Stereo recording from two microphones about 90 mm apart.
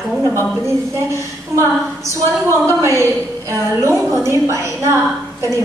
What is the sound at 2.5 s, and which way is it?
A woman's voice, 30° right (ahead or behind).